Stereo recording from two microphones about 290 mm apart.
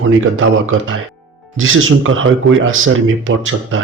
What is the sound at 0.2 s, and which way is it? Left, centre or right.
A man's voice, right.